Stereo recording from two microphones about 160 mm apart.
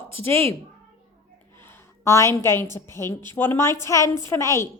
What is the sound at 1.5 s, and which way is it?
A woman's voice, 15° left (ahead or behind).